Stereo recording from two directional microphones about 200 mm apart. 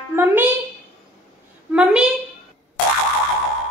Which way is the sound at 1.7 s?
5° right (ahead or behind).